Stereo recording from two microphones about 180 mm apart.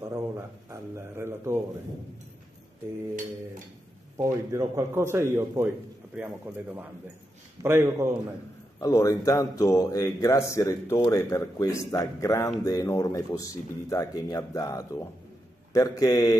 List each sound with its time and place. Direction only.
0.7 s a sound: 15° right (ahead or behind)
4.2 s a man's voice: 15° right (ahead or behind)
8.7 s speech: 15° left (ahead or behind)